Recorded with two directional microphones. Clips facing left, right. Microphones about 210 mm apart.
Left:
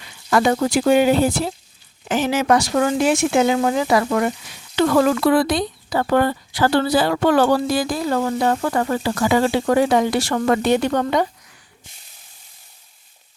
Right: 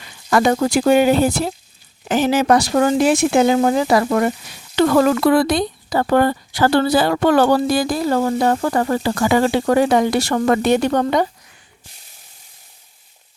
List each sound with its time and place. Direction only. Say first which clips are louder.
0.3 s speech: right 2 dB; 45° right (ahead or behind)
2.0 s speech: right 3 dB; 35° right (ahead or behind)